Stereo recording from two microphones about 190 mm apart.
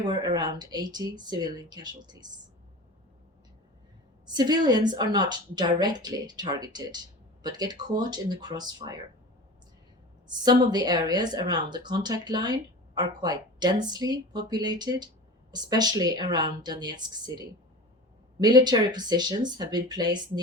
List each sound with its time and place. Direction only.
0.0 s speech: 20° right (ahead or behind)
4.3 s speech: 20° right (ahead or behind)
10.2 s speech: 20° right (ahead or behind)